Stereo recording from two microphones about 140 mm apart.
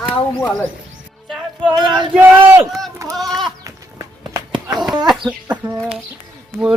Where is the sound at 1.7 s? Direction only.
35° right (ahead or behind).